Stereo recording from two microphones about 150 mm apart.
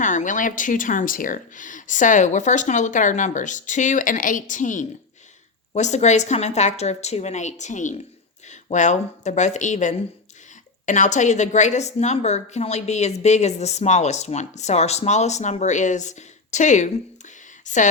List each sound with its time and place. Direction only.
0.0 s a woman's voice: 55° left (ahead or behind)